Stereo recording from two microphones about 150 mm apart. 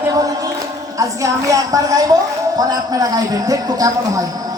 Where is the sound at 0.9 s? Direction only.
20° right (ahead or behind).